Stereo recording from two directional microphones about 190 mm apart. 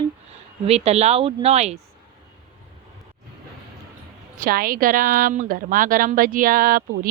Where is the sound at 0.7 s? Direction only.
35° right (ahead or behind).